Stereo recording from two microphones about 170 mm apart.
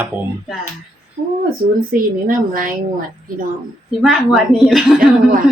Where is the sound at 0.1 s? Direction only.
10° right (ahead or behind).